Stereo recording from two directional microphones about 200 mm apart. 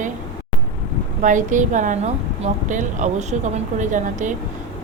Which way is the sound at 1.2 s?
40° right (ahead or behind).